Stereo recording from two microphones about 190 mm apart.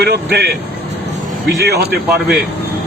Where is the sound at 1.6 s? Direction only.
55° right (ahead or behind).